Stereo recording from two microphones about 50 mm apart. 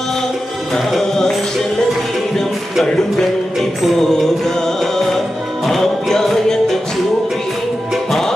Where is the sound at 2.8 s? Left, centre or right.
Centre.